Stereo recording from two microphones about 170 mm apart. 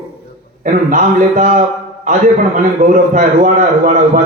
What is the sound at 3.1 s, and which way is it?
Speech, 45° right (ahead or behind).